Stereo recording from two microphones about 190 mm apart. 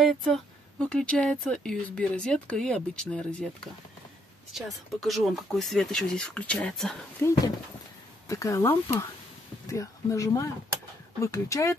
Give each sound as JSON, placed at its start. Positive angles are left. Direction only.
{"t": 0.0, "sound": "speech", "side_deg": 5}
{"t": 8.3, "sound": "speech", "side_deg": 15}